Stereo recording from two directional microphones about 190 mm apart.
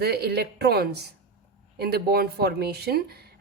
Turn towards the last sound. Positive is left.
turn(degrees=-55)  # may be behind; listen again after turning